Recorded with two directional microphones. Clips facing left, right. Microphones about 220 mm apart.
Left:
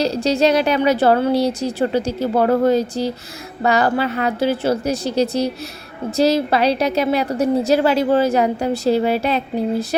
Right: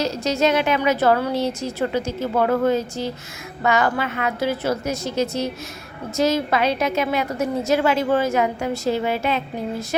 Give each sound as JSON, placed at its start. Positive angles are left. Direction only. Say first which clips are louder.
{"t": 0.0, "sound": "a woman's voice", "louder": "left 4 dB", "side_deg": 30}